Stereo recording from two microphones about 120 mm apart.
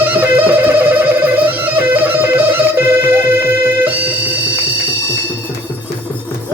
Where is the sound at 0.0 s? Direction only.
15° right (ahead or behind).